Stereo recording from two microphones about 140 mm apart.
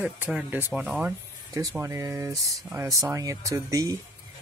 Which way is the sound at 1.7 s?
20° right (ahead or behind).